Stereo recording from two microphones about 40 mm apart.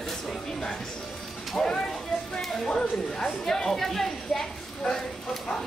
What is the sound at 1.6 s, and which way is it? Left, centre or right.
A woman's voice, centre.